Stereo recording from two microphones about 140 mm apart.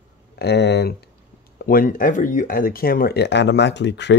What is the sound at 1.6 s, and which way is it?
Speech, 90° left.